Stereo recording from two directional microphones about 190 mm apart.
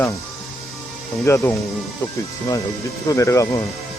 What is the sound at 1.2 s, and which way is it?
Speech, 15° left (ahead or behind).